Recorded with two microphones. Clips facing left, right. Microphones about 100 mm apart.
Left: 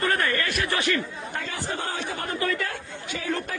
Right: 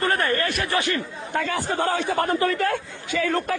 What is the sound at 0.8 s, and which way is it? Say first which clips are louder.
Speech: right 1 dB; 25° right (ahead or behind).